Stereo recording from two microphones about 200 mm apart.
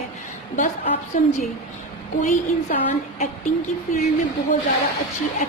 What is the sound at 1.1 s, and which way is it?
Speech, 40° left (ahead or behind).